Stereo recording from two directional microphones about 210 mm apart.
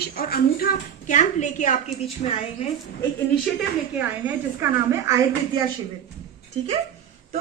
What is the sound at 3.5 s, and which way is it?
A woman's voice, 10° right (ahead or behind).